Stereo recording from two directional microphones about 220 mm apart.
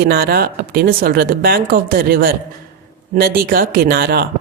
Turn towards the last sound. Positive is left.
turn(degrees=-45)  # may be behind; listen again after turning